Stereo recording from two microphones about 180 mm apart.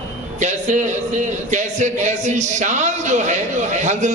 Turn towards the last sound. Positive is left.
turn(degrees=-40)  # may be behind; listen again after turning